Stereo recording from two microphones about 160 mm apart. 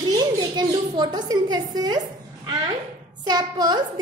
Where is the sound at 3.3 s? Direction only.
25° right (ahead or behind).